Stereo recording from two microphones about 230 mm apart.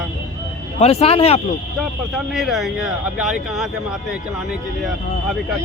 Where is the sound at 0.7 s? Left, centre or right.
Left.